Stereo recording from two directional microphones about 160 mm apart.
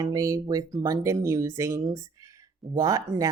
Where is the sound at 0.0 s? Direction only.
20° right (ahead or behind).